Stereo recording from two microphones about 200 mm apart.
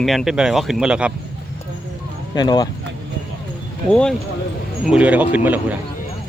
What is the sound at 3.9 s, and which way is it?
Speech, 5° left (ahead or behind).